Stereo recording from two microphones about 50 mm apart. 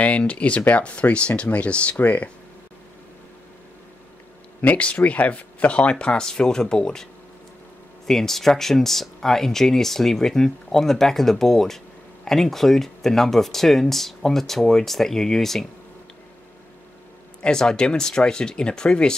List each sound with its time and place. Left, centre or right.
0.0 s speech: left
4.6 s speech: left; by 7.1 s centre
8.1 s speech: centre
17.4 s speech: centre